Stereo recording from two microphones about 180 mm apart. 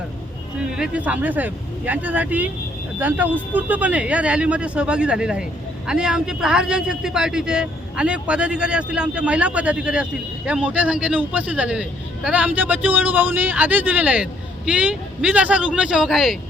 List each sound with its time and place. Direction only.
0.6 s speech: 5° right (ahead or behind)